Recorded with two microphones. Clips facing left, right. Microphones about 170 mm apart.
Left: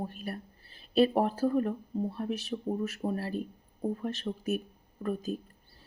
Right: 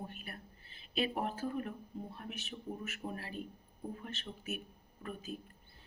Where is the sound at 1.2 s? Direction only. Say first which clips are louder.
Left 10 dB; 35° left (ahead or behind).